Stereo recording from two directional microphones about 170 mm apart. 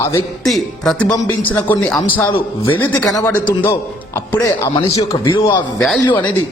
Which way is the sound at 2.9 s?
10° left (ahead or behind).